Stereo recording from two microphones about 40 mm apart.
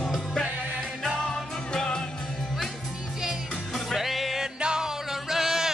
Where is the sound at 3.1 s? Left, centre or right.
Centre.